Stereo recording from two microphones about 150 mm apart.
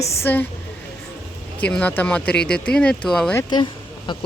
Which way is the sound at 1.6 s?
10° left (ahead or behind).